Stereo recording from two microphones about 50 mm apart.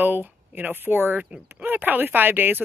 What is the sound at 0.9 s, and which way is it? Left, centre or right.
Speech, right.